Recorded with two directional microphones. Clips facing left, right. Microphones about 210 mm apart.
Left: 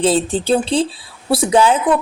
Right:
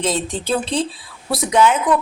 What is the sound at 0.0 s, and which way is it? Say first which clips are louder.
Speech: left 6 dB; 30° left (ahead or behind).